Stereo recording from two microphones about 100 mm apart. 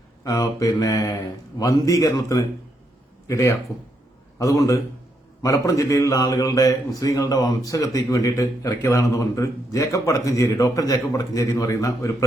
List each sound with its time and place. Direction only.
0.3 s a man's voice: 35° left (ahead or behind)